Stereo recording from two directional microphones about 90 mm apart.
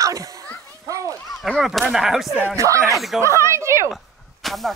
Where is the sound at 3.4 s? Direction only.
35° right (ahead or behind).